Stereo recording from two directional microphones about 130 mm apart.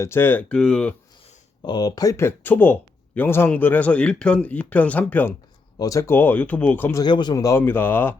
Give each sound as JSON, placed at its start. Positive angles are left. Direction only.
{"t": 0.0, "sound": "a man's voice", "side_deg": 20}
{"t": 1.6, "sound": "a man's voice", "side_deg": 30}
{"t": 5.8, "sound": "a man's voice", "side_deg": 25}
{"t": 7.0, "sound": "speech", "side_deg": 35}